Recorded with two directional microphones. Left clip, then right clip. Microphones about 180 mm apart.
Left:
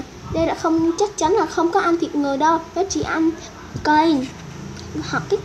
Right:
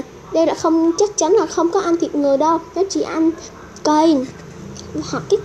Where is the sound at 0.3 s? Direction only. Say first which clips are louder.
Right 5 dB; 10° right (ahead or behind).